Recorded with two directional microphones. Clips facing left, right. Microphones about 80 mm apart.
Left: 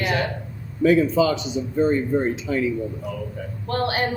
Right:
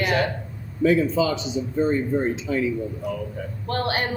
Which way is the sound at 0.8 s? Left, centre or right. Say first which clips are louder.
Left 2 dB; left.